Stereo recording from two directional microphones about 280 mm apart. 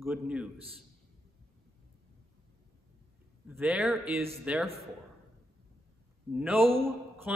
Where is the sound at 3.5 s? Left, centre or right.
Centre.